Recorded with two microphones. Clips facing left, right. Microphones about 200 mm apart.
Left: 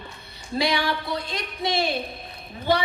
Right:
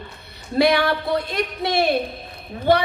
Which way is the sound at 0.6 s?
60° right (ahead or behind).